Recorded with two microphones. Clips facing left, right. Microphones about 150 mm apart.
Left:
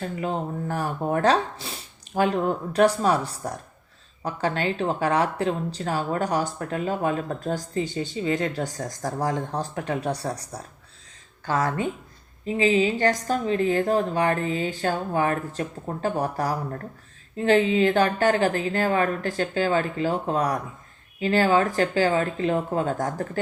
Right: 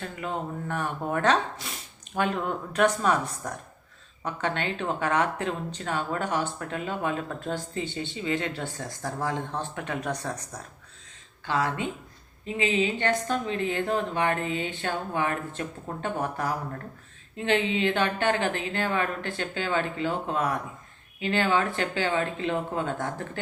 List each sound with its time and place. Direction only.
0.0 s speech: 35° left (ahead or behind)